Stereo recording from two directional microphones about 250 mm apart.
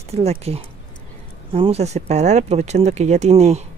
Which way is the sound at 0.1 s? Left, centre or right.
Right.